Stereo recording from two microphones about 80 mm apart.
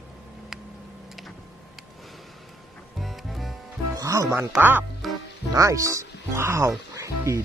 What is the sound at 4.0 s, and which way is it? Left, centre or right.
Music, right.